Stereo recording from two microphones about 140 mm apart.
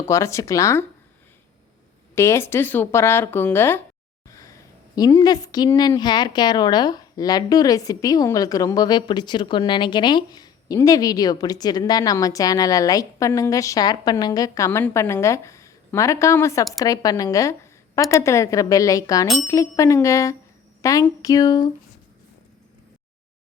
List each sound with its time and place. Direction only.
0.1 s a woman's voice: 20° left (ahead or behind)
2.1 s speech: 20° left (ahead or behind)
4.3 s a sound: 25° left (ahead or behind)
4.9 s a woman's voice: 25° left (ahead or behind)